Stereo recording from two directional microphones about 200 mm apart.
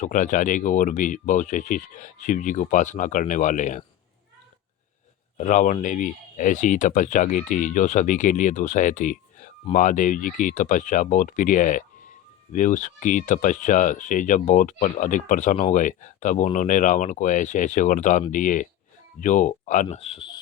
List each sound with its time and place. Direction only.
0.0 s speech: 40° left (ahead or behind)
5.4 s speech: 40° left (ahead or behind)